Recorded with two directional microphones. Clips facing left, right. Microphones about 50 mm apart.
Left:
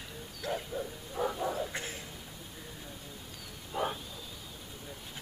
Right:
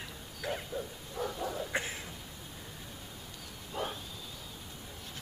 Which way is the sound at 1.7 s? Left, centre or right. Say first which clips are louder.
Right 4 dB; right.